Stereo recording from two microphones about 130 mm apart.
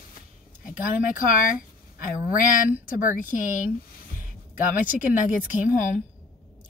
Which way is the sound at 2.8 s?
90° left.